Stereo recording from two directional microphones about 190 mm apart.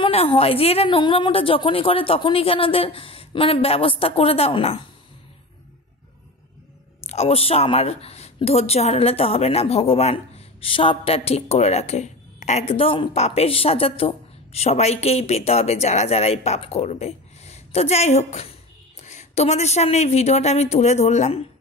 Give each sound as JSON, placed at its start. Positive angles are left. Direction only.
{"t": 0.0, "sound": "a woman's voice", "side_deg": 30}
{"t": 7.1, "sound": "a woman's voice", "side_deg": 35}